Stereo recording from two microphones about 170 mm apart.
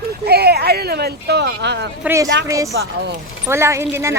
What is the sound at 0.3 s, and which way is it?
A woman's voice, 70° right (ahead or behind).